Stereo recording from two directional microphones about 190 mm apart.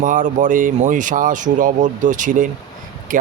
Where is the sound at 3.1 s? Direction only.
45° right (ahead or behind).